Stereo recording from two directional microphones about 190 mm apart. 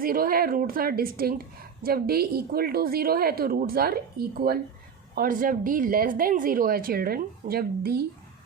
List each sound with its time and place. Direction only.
0.0 s a woman's voice: 50° right (ahead or behind)